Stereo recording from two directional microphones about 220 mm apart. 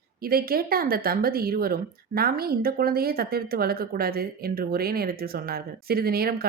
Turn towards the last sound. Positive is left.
turn(degrees=-45)  # may be behind; listen again after turning